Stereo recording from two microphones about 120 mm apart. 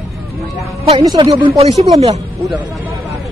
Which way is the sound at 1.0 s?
40° right (ahead or behind).